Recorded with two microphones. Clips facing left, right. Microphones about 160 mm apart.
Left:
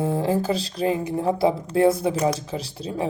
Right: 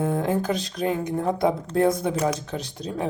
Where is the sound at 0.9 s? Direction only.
5° left (ahead or behind).